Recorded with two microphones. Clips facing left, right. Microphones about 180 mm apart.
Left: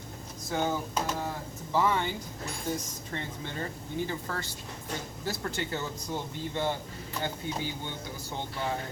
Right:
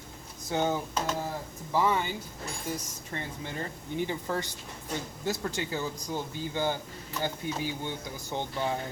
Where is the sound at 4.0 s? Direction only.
20° right (ahead or behind).